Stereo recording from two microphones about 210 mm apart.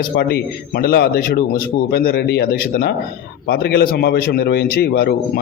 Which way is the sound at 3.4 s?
50° left (ahead or behind).